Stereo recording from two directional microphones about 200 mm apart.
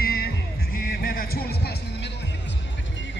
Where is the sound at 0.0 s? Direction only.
50° left (ahead or behind).